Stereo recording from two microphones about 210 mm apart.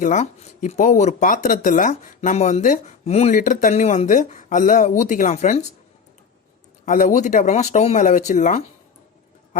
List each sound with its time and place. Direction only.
0.0 s speech: 35° left (ahead or behind)
6.8 s speech: 35° left (ahead or behind)